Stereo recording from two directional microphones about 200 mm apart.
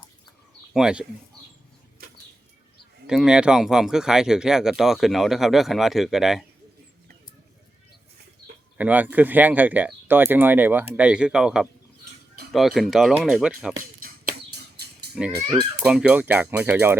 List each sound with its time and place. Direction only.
0.7 s speech: 5° right (ahead or behind)
2.0 s bird flight: 50° right (ahead or behind)
3.1 s speech: 5° right (ahead or behind)
8.8 s speech: 10° right (ahead or behind)
14.0 s a sound: 50° right (ahead or behind)
15.8 s speech: 5° right (ahead or behind)